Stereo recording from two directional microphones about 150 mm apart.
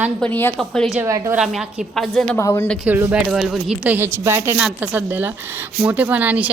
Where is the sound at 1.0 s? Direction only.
20° right (ahead or behind).